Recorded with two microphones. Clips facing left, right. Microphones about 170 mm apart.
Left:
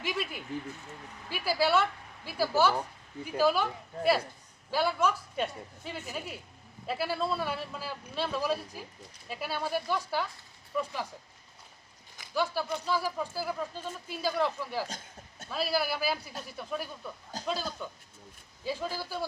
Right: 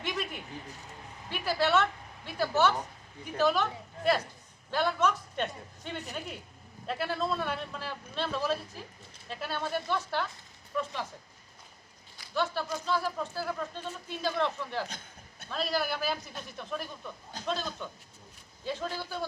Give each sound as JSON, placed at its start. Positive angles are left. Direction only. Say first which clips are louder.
{"t": 0.0, "sound": "speech", "louder": "left 1 dB", "side_deg": 5}
{"t": 12.3, "sound": "speech", "louder": "left 1 dB", "side_deg": 5}
{"t": 14.8, "sound": "a sound", "louder": "left 2 dB", "side_deg": 40}
{"t": 15.4, "sound": "speech", "louder": "left 1 dB", "side_deg": 5}